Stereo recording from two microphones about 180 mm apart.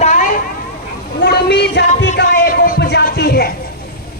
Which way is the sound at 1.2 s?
65° left (ahead or behind).